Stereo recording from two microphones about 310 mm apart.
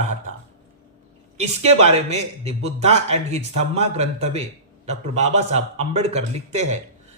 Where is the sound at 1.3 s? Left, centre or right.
Right.